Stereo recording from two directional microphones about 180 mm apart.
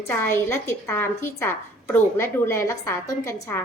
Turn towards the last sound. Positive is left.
turn(degrees=15)  # may be behind; listen again after turning